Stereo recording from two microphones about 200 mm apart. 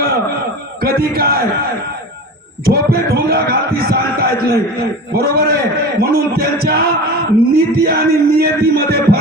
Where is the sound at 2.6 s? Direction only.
50° right (ahead or behind).